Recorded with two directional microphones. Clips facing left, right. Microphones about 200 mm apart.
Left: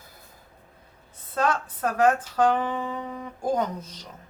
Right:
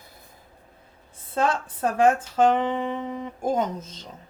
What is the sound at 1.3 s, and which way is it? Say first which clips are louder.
Speech: right 1 dB; 25° right (ahead or behind).